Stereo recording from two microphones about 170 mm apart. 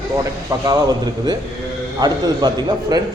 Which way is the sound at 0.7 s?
25° right (ahead or behind).